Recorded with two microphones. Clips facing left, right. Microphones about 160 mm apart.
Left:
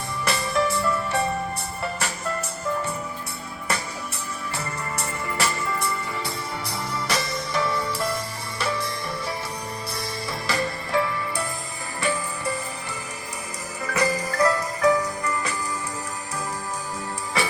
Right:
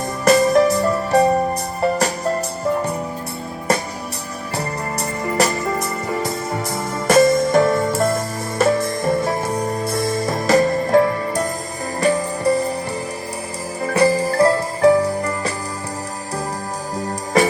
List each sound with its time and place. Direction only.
0.3 s music: 40° right (ahead or behind)
13.8 s music: 30° right (ahead or behind)
17.3 s music: 45° right (ahead or behind)